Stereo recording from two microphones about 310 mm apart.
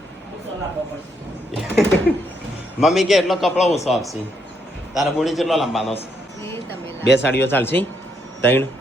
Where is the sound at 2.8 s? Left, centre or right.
Centre.